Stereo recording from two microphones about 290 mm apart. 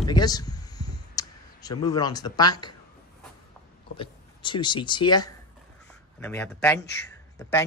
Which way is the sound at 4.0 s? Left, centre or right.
Centre.